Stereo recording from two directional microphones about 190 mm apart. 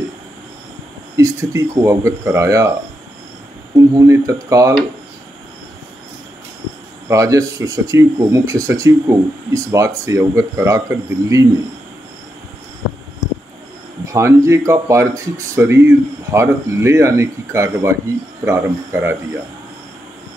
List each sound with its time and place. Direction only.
1.1 s speech: 15° right (ahead or behind)
3.7 s speech: 20° right (ahead or behind)
7.1 s speech: 15° right (ahead or behind)
14.0 s speech: 15° right (ahead or behind)